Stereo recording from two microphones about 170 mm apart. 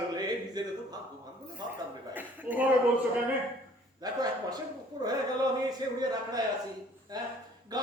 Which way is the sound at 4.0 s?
25° right (ahead or behind).